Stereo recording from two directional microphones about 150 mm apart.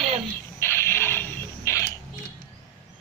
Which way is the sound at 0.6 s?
15° left (ahead or behind).